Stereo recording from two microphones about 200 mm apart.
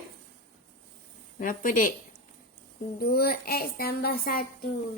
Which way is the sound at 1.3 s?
45° left (ahead or behind).